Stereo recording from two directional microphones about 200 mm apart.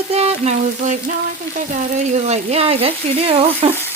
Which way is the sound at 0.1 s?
30° right (ahead or behind).